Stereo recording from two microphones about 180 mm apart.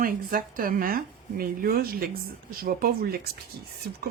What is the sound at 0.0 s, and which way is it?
Speech, 50° right (ahead or behind).